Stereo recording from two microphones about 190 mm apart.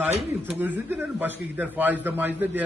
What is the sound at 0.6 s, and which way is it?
A man's voice, 10° right (ahead or behind).